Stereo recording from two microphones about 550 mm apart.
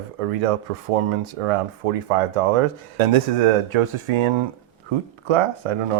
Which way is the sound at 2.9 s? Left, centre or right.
Right.